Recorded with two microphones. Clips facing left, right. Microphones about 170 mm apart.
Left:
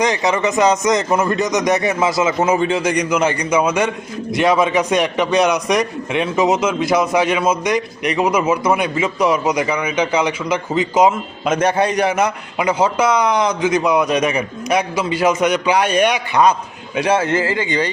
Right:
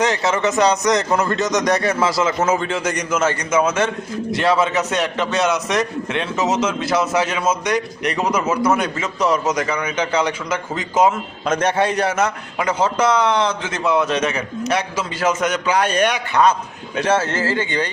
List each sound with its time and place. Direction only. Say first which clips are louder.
0.0 s a man's voice: left 1 dB; 15° left (ahead or behind)